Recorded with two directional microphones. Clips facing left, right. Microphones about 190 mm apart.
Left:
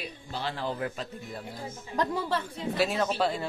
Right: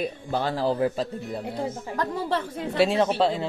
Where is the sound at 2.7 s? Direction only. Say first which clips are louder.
Right 6 dB; 25° right (ahead or behind).